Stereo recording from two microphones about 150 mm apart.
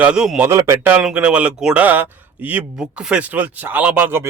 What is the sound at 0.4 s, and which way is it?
Speech, 15° right (ahead or behind).